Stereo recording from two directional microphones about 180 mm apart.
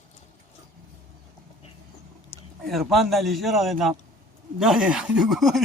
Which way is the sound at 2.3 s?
35° left (ahead or behind).